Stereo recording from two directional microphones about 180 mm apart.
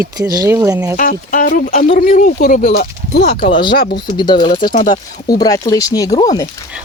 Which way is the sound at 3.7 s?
55° left (ahead or behind).